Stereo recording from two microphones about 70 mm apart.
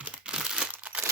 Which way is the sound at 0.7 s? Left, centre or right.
Right.